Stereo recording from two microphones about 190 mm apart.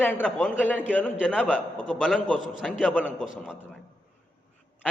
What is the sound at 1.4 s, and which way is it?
A man's voice, 5° right (ahead or behind).